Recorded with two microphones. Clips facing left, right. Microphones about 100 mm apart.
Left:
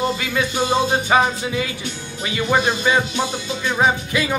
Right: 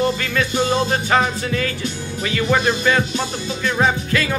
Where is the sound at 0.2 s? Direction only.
15° left (ahead or behind).